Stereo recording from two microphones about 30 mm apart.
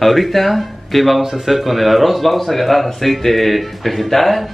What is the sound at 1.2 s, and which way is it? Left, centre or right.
Speech, centre.